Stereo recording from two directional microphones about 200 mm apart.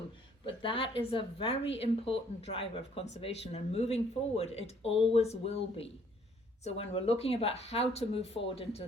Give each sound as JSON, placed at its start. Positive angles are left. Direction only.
{"t": 0.4, "sound": "speech", "side_deg": 25}